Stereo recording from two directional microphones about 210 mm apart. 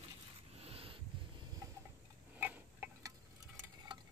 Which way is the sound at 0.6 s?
30° right (ahead or behind).